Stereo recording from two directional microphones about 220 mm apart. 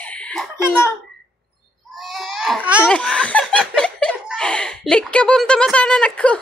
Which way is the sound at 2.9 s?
5° left (ahead or behind).